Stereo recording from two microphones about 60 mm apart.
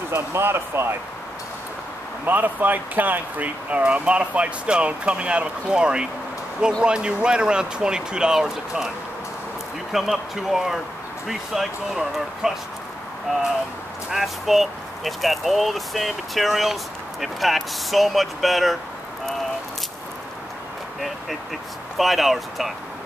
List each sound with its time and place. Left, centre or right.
0.1 s speech: right
2.2 s speech: right; by 8.9 s centre
9.9 s speech: centre
14.1 s speech: centre
21.9 s speech: centre